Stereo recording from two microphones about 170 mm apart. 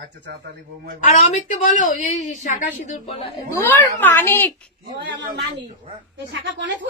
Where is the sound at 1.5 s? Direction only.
50° left (ahead or behind); by 3.3 s 35° left (ahead or behind).